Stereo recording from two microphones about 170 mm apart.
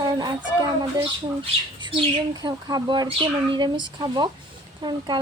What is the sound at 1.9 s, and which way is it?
A woman's voice, 30° right (ahead or behind).